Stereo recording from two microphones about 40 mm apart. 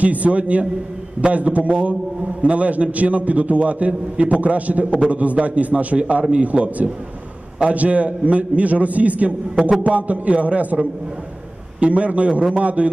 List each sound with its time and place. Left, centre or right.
0.0 s a man's voice: right
11.8 s a man's voice: right